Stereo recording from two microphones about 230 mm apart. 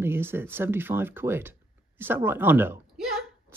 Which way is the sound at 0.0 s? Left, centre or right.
Centre.